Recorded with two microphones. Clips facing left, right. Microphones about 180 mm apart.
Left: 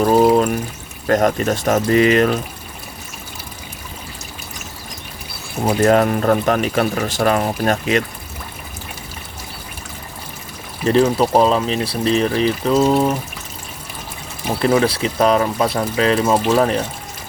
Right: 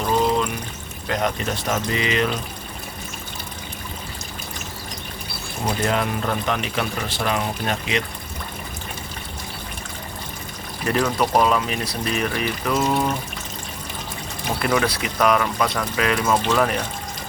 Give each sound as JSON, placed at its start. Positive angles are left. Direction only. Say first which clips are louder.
{"t": 0.0, "sound": "pour", "louder": "left 8 dB", "side_deg": 45}
{"t": 1.0, "sound": "speech", "louder": "left 8 dB", "side_deg": 45}
{"t": 5.6, "sound": "speech", "louder": "left 9 dB", "side_deg": 45}
{"t": 10.8, "sound": "speech", "louder": "left 7 dB", "side_deg": 25}
{"t": 14.6, "sound": "speech", "louder": "left 6 dB", "side_deg": 30}